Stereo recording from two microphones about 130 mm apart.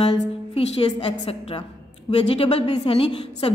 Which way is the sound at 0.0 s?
50° left (ahead or behind).